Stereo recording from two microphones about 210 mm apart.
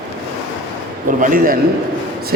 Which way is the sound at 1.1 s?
40° right (ahead or behind).